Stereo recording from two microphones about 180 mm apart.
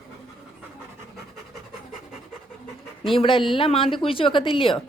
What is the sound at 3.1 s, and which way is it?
A woman's voice, 30° left (ahead or behind).